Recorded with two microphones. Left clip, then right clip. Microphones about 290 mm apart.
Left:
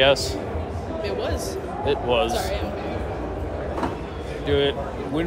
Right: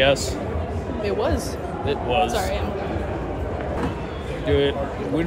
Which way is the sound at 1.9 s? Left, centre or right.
Centre.